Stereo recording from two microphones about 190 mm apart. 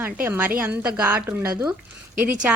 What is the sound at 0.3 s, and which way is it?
A woman's voice, 10° right (ahead or behind).